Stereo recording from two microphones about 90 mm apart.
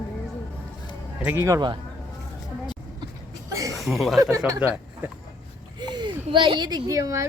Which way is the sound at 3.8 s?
Centre (ahead or behind).